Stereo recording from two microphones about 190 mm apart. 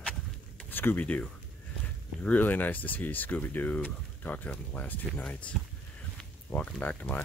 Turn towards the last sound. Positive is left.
turn(degrees=10)  # may be behind; listen again after turning